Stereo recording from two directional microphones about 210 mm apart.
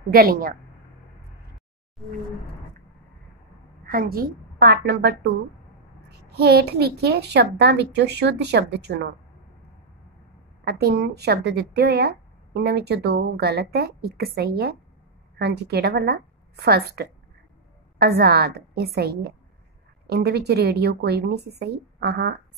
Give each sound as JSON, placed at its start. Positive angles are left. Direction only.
{"t": 0.1, "sound": "a woman's voice", "side_deg": -45}
{"t": 3.8, "sound": "a woman's voice", "side_deg": -45}
{"t": 6.3, "sound": "a woman's voice", "side_deg": -50}
{"t": 10.6, "sound": "a woman's voice", "side_deg": -50}